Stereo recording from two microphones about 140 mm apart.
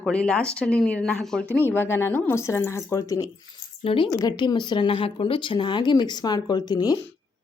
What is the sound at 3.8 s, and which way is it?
Speech, 40° left (ahead or behind).